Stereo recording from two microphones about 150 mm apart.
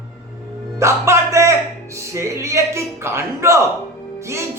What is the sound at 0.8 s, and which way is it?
A man's voice, 20° right (ahead or behind).